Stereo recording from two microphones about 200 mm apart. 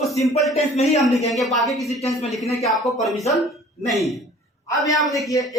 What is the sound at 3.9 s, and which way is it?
Speech, centre (ahead or behind).